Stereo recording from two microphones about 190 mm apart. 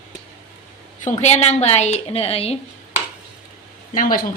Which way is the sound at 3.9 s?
45° left (ahead or behind).